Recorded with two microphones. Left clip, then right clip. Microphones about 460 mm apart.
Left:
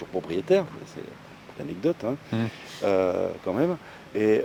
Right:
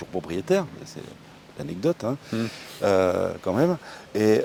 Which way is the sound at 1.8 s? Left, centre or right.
Right.